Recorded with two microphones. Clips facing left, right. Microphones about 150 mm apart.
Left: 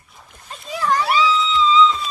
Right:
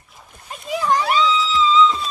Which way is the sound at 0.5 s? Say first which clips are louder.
Right 3 dB; 15° right (ahead or behind).